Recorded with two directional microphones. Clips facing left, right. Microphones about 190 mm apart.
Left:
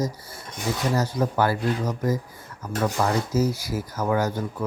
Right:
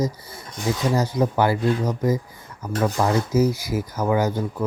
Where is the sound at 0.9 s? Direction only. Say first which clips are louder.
Right 3 dB; 10° right (ahead or behind).